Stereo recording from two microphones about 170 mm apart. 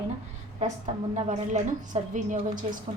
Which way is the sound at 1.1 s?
45° right (ahead or behind).